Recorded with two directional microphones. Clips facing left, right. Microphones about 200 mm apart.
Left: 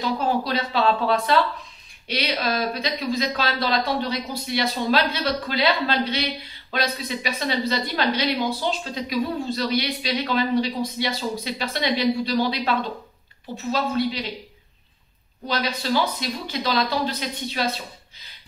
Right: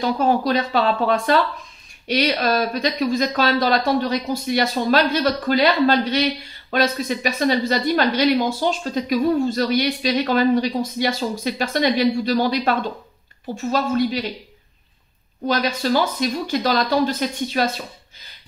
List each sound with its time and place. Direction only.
0.0 s speech: 50° right (ahead or behind)
15.4 s speech: 45° right (ahead or behind)